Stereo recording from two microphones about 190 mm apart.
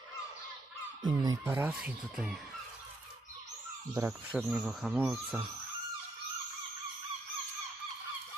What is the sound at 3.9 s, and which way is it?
Speech, 15° right (ahead or behind).